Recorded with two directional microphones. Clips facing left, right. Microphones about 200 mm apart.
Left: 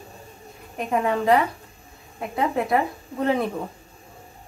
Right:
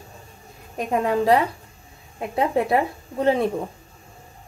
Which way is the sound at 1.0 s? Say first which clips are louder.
Right 1 dB; 35° right (ahead or behind).